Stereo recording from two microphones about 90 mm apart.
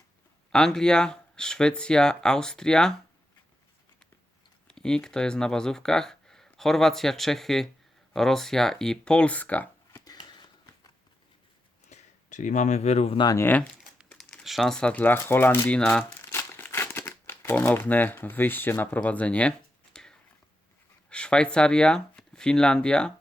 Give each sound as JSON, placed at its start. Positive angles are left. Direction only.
{"t": 0.5, "sound": "speech", "side_deg": 5}
{"t": 4.7, "sound": "speech", "side_deg": 10}
{"t": 9.9, "sound": "a sound", "side_deg": 45}
{"t": 13.3, "sound": "speech", "side_deg": 25}
{"t": 14.1, "sound": "speech", "side_deg": 10}
{"t": 15.6, "sound": "speech", "side_deg": 15}
{"t": 16.0, "sound": "crumpling", "side_deg": 25}
{"t": 21.1, "sound": "speech", "side_deg": 10}